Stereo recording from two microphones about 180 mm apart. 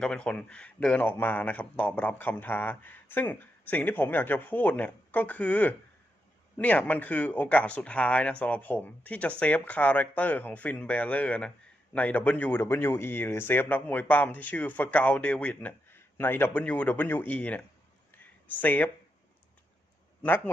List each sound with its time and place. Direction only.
0.0 s speech: 5° left (ahead or behind)
18.2 s a sound: 10° left (ahead or behind)
20.2 s speech: 10° left (ahead or behind)